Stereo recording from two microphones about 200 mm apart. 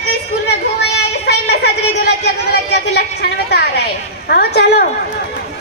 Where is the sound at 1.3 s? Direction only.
55° left (ahead or behind).